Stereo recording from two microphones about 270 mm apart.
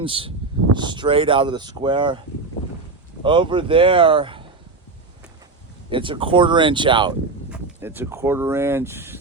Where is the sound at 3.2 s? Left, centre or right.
Centre.